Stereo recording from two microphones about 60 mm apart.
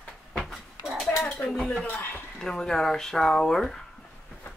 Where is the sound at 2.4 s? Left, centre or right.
Centre.